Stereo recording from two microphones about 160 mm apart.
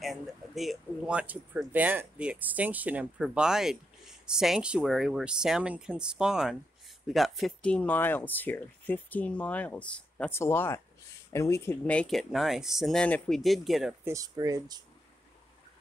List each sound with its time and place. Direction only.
0.0 s speech: centre (ahead or behind)
14.0 s speech: 20° right (ahead or behind)